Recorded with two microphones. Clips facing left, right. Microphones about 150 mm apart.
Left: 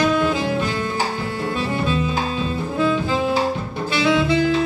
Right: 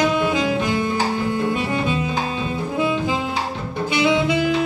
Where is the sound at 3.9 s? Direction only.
20° right (ahead or behind).